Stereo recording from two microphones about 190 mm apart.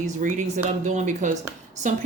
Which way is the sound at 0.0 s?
40° right (ahead or behind).